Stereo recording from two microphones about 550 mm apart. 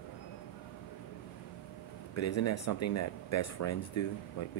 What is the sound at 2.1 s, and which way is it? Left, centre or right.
Speech, left.